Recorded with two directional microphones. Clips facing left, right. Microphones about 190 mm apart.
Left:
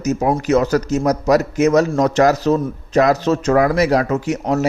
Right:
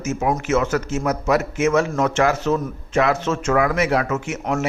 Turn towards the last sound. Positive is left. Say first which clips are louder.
# left 5 dB
turn(degrees=35)  # may be behind; listen again after turning